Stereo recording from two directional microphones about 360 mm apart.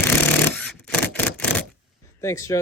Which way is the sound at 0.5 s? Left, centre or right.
Centre.